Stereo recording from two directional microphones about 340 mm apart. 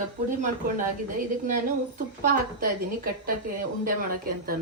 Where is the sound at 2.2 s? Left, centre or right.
Right.